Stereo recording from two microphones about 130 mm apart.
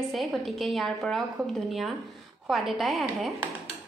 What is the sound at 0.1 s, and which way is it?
A woman's voice, centre (ahead or behind).